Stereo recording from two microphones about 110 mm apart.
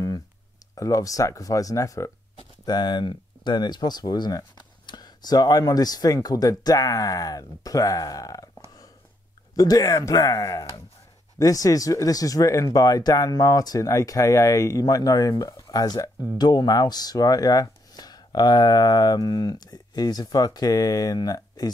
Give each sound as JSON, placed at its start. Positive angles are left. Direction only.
{"t": 0.7, "sound": "speech", "side_deg": 30}
{"t": 2.6, "sound": "speech", "side_deg": 40}
{"t": 9.6, "sound": "speech", "side_deg": 35}